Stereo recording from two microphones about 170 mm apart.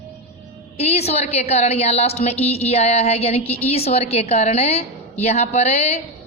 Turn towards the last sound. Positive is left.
turn(degrees=40)  # may be behind; listen again after turning